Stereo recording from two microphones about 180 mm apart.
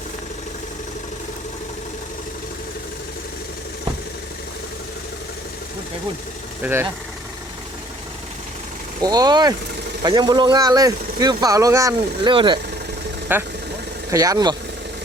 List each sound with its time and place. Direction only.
6.6 s speech: 10° right (ahead or behind)
9.0 s speech: 20° right (ahead or behind)
13.3 s speech: 10° right (ahead or behind)